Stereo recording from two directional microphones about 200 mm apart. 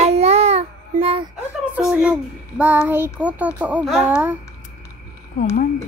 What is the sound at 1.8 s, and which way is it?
Speech, 5° right (ahead or behind).